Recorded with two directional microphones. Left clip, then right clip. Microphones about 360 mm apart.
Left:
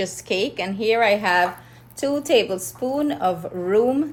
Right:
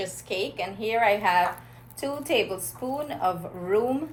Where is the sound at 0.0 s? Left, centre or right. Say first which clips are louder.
Left 6 dB; left.